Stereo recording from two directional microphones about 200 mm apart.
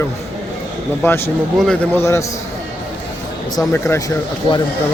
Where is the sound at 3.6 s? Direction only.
10° left (ahead or behind).